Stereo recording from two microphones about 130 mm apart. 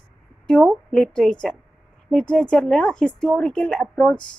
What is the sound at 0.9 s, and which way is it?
A woman's voice, 5° left (ahead or behind).